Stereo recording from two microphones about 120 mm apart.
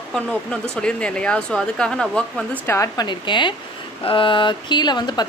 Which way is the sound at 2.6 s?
25° left (ahead or behind).